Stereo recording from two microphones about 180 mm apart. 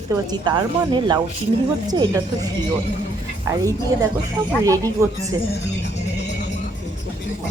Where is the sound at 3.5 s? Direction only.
15° right (ahead or behind).